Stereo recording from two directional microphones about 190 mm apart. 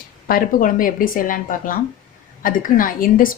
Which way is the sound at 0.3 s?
50° left (ahead or behind).